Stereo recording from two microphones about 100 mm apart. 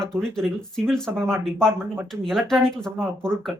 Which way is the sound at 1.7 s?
25° right (ahead or behind).